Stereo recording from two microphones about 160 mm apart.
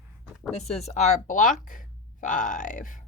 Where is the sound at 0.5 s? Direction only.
40° left (ahead or behind).